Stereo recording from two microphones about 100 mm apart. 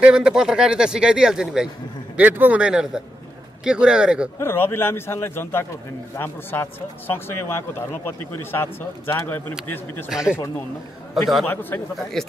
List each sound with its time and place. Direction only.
0.0 s speech: 10° right (ahead or behind)
2.1 s speech: 15° right (ahead or behind)
4.4 s speech: 25° left (ahead or behind)
10.0 s speech: 5° right (ahead or behind)
11.4 s speech: 20° left (ahead or behind)
12.2 s speech: 5° left (ahead or behind)